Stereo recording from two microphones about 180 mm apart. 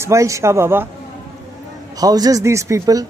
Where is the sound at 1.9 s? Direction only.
20° right (ahead or behind).